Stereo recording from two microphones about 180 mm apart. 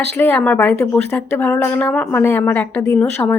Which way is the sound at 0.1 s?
10° left (ahead or behind).